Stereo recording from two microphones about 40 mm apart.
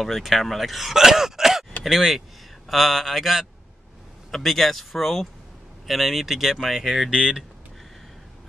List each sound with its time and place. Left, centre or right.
0.0 s speech: centre
7.1 s speech: right